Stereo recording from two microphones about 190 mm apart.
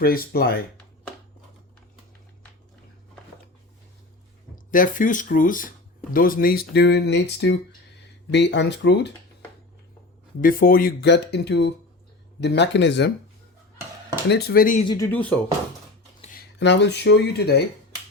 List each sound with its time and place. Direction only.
0.0 s speech: 55° left (ahead or behind)
4.5 s speech: 45° left (ahead or behind); by 9.1 s 65° left (ahead or behind)
10.4 s speech: 50° left (ahead or behind); by 13.1 s 65° left (ahead or behind)
14.3 s speech: 55° left (ahead or behind)
14.8 s speech: 15° left (ahead or behind)
16.2 s speech: 50° left (ahead or behind)